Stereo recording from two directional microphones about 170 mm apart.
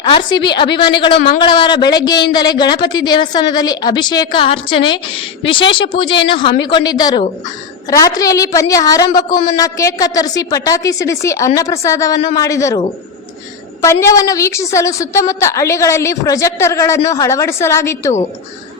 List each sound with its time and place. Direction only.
0.0 s a woman's voice: 30° left (ahead or behind)